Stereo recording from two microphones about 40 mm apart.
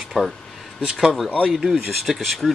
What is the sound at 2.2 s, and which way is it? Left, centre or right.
Speech, centre.